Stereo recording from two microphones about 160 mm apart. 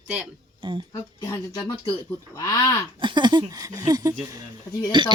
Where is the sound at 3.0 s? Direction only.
30° right (ahead or behind).